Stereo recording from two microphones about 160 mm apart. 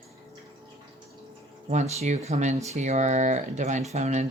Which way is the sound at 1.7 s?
45° right (ahead or behind).